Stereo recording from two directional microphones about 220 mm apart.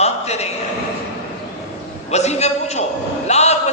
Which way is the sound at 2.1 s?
30° left (ahead or behind).